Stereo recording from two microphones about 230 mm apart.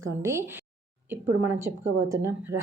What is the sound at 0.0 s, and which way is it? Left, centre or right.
Speech, centre.